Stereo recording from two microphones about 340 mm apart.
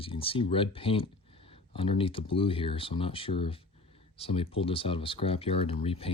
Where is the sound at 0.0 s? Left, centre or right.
Centre.